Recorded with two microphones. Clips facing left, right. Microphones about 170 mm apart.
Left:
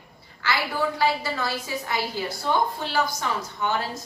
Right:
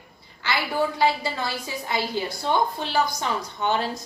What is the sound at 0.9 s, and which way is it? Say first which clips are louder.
A woman's voice: right 1 dB; 20° right (ahead or behind).